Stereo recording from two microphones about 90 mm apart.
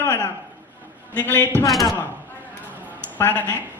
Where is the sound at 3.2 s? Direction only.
20° left (ahead or behind).